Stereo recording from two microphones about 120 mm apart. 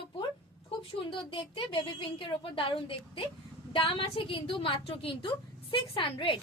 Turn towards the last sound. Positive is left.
turn(degrees=45)  # may be behind; listen again after turning